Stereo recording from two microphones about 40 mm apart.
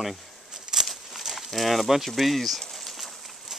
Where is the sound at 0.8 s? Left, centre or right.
Centre.